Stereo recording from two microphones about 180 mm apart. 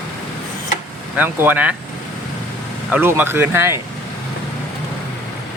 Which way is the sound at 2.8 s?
10° right (ahead or behind).